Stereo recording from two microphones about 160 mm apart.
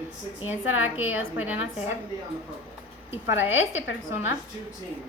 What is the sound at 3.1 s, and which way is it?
Speech, 15° right (ahead or behind).